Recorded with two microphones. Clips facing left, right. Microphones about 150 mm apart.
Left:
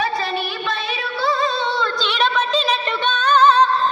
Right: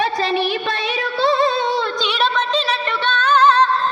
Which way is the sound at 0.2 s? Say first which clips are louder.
Right 5 dB; 80° right.